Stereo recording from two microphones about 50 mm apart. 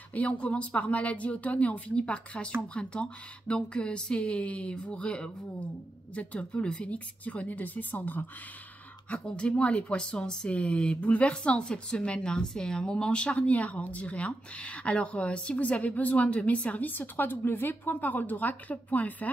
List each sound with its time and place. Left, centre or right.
0.1 s speech: left
9.1 s speech: left